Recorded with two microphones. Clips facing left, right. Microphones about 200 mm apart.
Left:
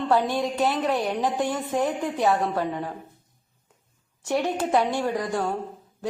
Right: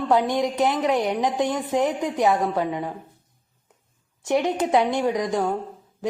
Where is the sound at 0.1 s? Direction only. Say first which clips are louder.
Right 3 dB; 15° right (ahead or behind).